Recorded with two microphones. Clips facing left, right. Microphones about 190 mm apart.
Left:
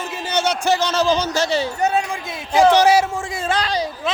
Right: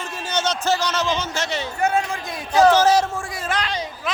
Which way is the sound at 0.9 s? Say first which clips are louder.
Left 5 dB; 35° left (ahead or behind).